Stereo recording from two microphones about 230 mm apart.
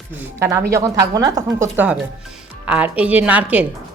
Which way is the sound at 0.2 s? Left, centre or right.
Centre.